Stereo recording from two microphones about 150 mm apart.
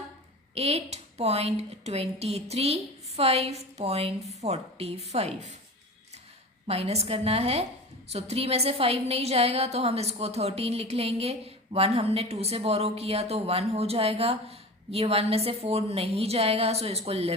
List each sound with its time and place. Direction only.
0.5 s a woman's voice: 45° right (ahead or behind)
6.7 s a woman's voice: 45° right (ahead or behind)